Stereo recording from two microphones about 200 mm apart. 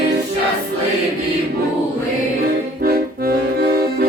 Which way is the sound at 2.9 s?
50° right (ahead or behind).